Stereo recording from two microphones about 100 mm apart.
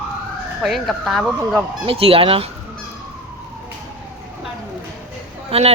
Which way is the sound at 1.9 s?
70° right (ahead or behind).